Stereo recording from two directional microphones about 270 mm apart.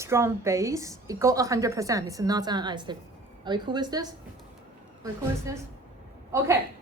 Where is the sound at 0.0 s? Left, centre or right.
Centre.